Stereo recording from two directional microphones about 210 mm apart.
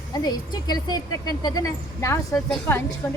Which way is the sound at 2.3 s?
Centre (ahead or behind).